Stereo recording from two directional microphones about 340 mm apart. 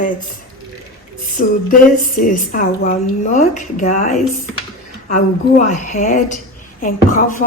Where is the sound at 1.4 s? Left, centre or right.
Left.